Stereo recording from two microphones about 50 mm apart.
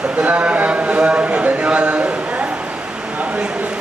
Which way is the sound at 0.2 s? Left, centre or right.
Right.